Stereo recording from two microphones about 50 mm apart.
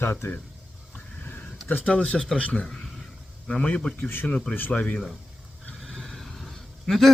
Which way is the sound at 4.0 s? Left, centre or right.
Left.